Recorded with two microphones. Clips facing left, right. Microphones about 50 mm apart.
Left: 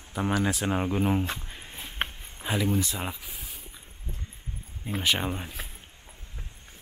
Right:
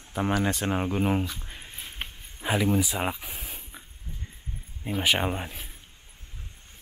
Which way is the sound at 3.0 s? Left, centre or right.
Right.